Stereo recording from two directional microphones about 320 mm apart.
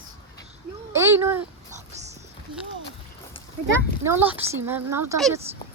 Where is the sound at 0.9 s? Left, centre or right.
Centre.